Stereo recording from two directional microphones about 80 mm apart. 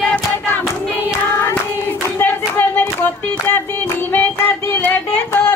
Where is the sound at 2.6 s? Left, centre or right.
Left.